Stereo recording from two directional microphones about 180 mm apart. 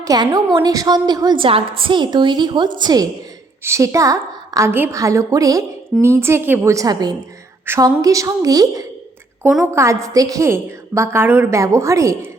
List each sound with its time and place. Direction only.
0.0 s a woman's voice: 20° right (ahead or behind)
9.4 s a woman's voice: centre (ahead or behind)
9.7 s a woman's voice: 15° right (ahead or behind)